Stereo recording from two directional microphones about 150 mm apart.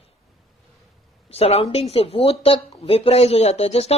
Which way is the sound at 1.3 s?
40° left (ahead or behind).